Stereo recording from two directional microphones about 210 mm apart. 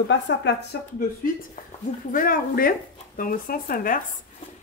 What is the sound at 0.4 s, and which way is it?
Speech, 55° left (ahead or behind).